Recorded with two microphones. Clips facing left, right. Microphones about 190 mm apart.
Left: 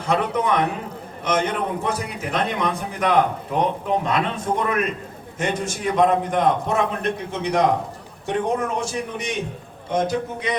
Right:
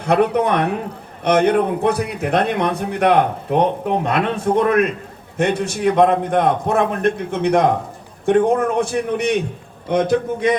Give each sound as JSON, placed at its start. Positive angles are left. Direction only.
{"t": 0.0, "sound": "a man's voice", "side_deg": -65}